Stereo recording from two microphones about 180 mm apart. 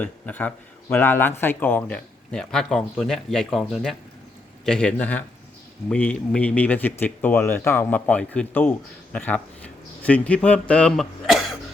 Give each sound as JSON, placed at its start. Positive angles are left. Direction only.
{"t": 0.0, "sound": "a man's voice", "side_deg": 10}